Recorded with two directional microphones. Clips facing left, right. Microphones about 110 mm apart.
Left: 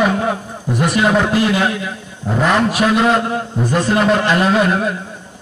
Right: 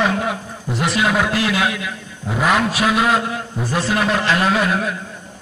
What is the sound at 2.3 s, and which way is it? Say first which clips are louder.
Speech: left 2 dB; 10° right (ahead or behind).